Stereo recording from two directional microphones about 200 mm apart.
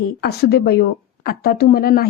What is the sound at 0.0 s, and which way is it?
A woman's voice, 55° left (ahead or behind).